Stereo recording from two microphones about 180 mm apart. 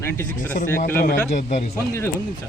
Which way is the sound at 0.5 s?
50° left (ahead or behind).